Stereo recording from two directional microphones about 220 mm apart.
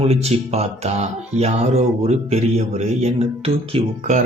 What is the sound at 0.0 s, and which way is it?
Speech, 30° right (ahead or behind).